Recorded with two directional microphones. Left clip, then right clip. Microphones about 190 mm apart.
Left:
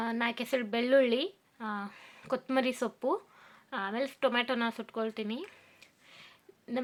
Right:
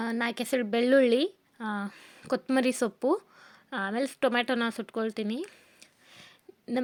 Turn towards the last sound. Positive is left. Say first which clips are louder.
# right 5 dB
turn(degrees=-45)  # may be behind; listen again after turning